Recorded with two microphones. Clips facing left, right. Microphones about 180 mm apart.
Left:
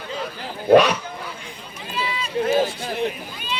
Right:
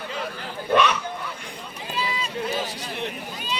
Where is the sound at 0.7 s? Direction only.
40° left (ahead or behind).